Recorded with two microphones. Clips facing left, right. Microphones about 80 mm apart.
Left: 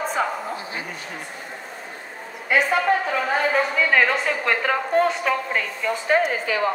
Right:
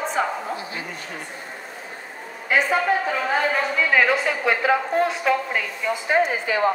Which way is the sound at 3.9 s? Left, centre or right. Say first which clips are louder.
Even; centre.